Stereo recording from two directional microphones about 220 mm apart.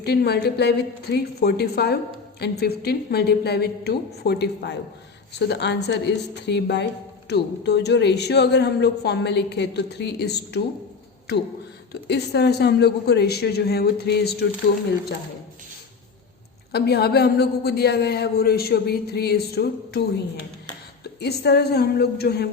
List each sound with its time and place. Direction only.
0.0 s a woman's voice: 50° left (ahead or behind)
12.0 s a woman's voice: 50° left (ahead or behind)
16.7 s a woman's voice: 45° left (ahead or behind)
21.0 s a woman's voice: 50° left (ahead or behind)